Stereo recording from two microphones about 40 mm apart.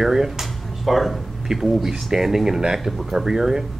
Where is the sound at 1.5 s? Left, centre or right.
Centre.